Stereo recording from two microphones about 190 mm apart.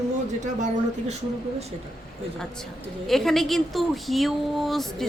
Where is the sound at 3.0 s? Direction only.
Centre (ahead or behind).